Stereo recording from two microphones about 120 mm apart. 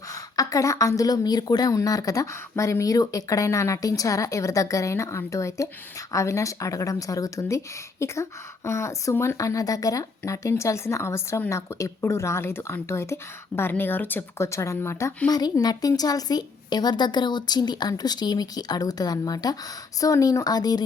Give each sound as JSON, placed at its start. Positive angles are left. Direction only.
{"t": 0.1, "sound": "speech", "side_deg": 30}
{"t": 15.3, "sound": "a woman's voice", "side_deg": 35}